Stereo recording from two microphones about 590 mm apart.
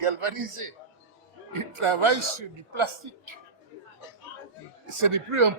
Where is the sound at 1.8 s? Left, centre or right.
Right.